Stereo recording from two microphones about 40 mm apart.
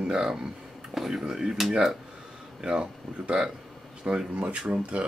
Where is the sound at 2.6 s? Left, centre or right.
Right.